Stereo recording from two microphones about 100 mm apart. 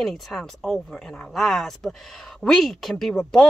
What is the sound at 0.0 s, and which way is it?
A woman's voice, 5° left (ahead or behind).